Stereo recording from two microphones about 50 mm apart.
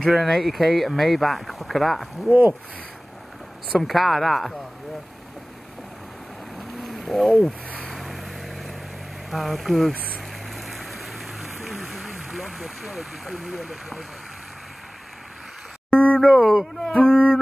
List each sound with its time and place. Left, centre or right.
0.0 s speech: centre
3.7 s speech: centre
6.8 s a sound: centre
7.9 s vehicle: centre
9.3 s speech: centre
9.9 s a sound: left
10.5 s vehicle: centre
15.9 s a sound: left
16.3 s speech: centre
16.9 s speech: left